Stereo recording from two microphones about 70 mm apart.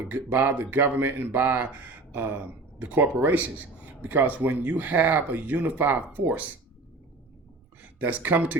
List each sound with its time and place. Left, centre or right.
0.1 s speech: right
7.8 s speech: right